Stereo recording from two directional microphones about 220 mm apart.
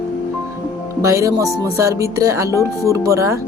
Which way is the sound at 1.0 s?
15° right (ahead or behind).